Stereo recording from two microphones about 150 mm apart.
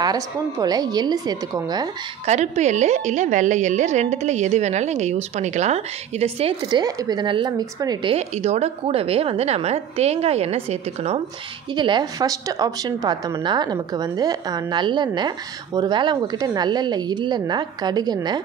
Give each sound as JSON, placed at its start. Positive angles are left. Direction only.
{"t": 0.0, "sound": "a woman's voice", "side_deg": -25}
{"t": 2.2, "sound": "a woman's voice", "side_deg": -50}
{"t": 6.7, "sound": "a woman's voice", "side_deg": -25}
{"t": 8.1, "sound": "a woman's voice", "side_deg": -45}
{"t": 11.7, "sound": "a woman's voice", "side_deg": -30}